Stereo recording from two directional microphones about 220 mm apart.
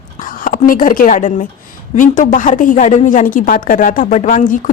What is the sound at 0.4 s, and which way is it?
A woman's voice, 40° left (ahead or behind).